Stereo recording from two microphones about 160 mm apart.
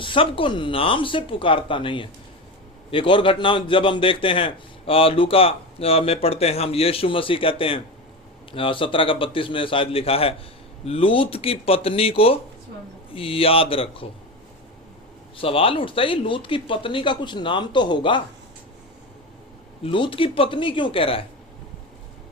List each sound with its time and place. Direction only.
0.0 s a man's voice: 35° left (ahead or behind)
15.4 s a man's voice: 35° left (ahead or behind)
19.8 s a man's voice: 35° left (ahead or behind)